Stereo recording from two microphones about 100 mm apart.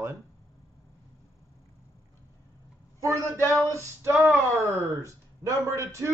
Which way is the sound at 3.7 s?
30° right (ahead or behind).